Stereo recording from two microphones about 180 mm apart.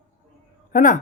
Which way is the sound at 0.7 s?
45° left (ahead or behind).